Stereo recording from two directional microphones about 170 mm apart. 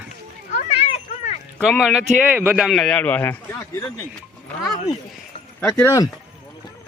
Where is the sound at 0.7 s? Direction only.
35° left (ahead or behind).